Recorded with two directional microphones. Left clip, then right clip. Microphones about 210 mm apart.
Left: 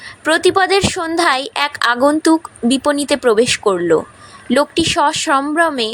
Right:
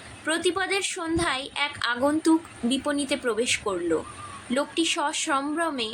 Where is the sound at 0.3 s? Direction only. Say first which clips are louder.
Left 13 dB; 45° left (ahead or behind).